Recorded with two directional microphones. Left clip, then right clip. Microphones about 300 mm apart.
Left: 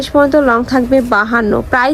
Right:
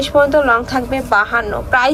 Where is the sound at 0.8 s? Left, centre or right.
Left.